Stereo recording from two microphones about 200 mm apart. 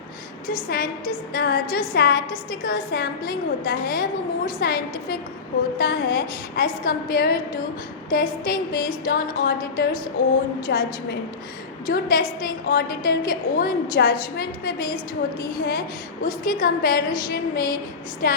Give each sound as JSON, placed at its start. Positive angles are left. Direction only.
{"t": 0.4, "sound": "a woman's voice", "side_deg": 45}
{"t": 10.7, "sound": "a woman's voice", "side_deg": 60}
{"t": 11.9, "sound": "a woman's voice", "side_deg": 50}
{"t": 16.2, "sound": "a woman's voice", "side_deg": 45}